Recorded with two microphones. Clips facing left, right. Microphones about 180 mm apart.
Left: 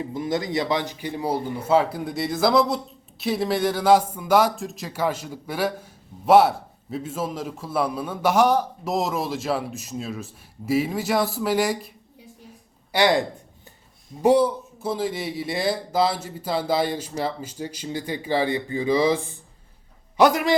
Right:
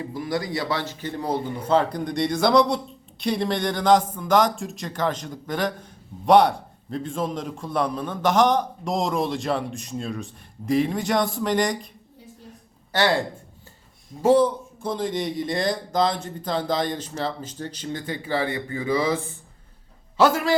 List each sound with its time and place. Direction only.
0.0 s a man's voice: 20° left (ahead or behind); by 11.9 s 5° left (ahead or behind)
12.9 s speech: 15° left (ahead or behind)